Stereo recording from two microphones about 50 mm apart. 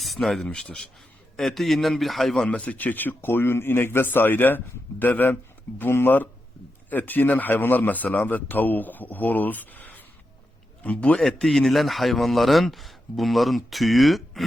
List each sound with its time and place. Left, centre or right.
0.0 s speech: centre
0.4 s a man's voice: centre
1.4 s speech: centre
2.5 s a man's voice: left
11.4 s speech: centre